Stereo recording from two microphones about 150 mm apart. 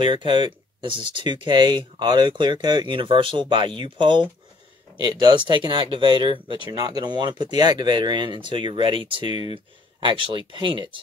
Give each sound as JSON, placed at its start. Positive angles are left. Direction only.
{"t": 0.0, "sound": "speech", "side_deg": -35}